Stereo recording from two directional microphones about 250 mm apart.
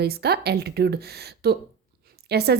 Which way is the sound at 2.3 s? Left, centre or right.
Right.